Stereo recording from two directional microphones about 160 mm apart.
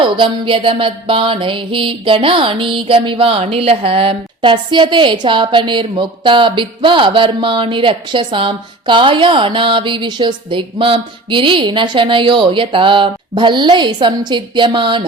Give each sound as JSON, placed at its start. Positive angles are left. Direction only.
{"t": 0.0, "sound": "music", "side_deg": -30}